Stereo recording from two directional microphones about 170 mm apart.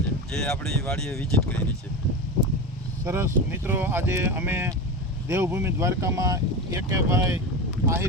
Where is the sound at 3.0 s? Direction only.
15° right (ahead or behind).